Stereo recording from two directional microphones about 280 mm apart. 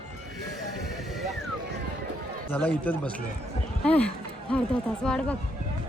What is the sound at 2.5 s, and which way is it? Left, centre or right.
Speech, centre.